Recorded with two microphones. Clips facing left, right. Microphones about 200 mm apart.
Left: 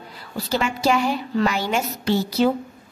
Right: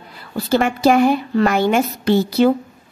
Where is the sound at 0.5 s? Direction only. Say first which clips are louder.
Right 6 dB; 55° right (ahead or behind).